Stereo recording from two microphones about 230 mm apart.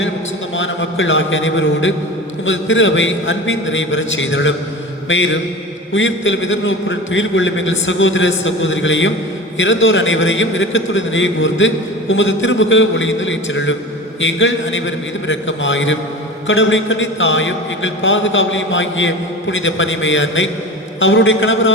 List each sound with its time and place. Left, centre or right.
0.5 s a man's voice: left
5.0 s mantra: left
5.9 s a man's voice: left